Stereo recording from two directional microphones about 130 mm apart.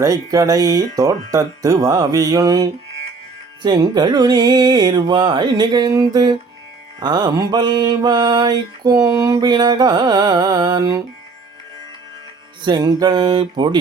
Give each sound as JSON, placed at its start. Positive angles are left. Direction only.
{"t": 0.0, "sound": "speech", "side_deg": -25}
{"t": 3.6, "sound": "mantra", "side_deg": -35}
{"t": 12.6, "sound": "mantra", "side_deg": -30}